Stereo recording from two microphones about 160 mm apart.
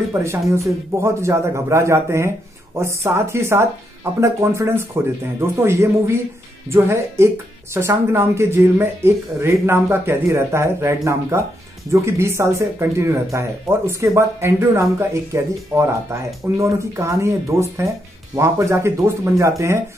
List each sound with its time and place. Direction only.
0.1 s speech: 15° right (ahead or behind)